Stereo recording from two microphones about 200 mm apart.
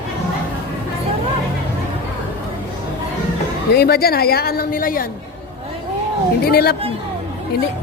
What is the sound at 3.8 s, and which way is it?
A woman's voice, 50° left (ahead or behind).